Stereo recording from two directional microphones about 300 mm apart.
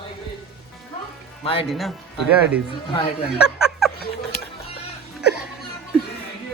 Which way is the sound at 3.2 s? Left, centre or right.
Centre.